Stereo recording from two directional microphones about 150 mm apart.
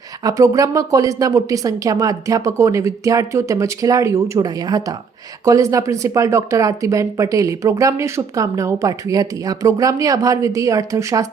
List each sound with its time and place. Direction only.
0.2 s speech: 25° right (ahead or behind)